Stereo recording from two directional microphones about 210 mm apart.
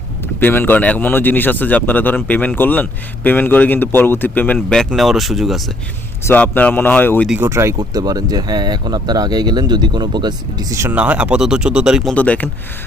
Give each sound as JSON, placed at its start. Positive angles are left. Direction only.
{"t": 0.3, "sound": "speech", "side_deg": 10}
{"t": 7.3, "sound": "speech", "side_deg": -10}
{"t": 12.1, "sound": "speech", "side_deg": 5}